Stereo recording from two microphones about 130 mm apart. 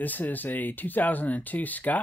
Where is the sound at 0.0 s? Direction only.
15° left (ahead or behind).